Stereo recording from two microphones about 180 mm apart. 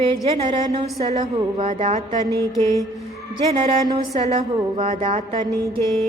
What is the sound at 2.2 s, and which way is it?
Mantra, 20° left (ahead or behind).